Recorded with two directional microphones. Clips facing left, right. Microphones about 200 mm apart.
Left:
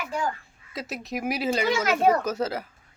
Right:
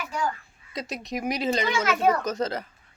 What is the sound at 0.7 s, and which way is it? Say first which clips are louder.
A man's voice: even; 5° left (ahead or behind).